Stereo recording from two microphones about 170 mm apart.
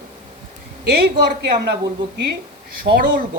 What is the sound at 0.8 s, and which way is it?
A woman's voice, 70° right (ahead or behind).